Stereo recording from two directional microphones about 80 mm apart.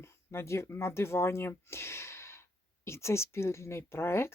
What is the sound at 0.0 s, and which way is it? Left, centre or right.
Speech, left.